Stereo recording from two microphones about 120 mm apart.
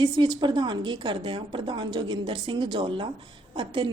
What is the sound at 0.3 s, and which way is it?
A woman's voice, 40° right (ahead or behind).